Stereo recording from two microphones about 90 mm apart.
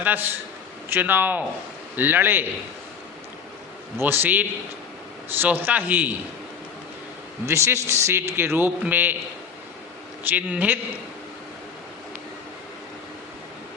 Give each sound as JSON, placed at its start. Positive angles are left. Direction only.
{"t": 0.0, "sound": "a man's voice", "side_deg": -20}
{"t": 3.9, "sound": "a man's voice", "side_deg": -20}
{"t": 7.4, "sound": "a man's voice", "side_deg": -30}
{"t": 10.2, "sound": "a man's voice", "side_deg": -15}